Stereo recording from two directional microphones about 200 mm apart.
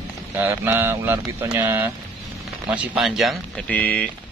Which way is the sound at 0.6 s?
10° right (ahead or behind).